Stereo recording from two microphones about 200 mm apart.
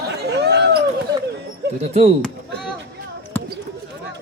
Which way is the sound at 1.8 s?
30° right (ahead or behind).